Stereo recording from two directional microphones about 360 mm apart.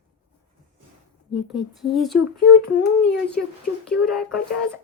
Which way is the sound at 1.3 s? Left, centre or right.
Centre.